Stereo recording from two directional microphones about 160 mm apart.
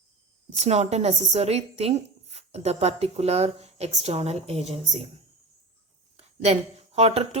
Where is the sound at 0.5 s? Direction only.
45° right (ahead or behind).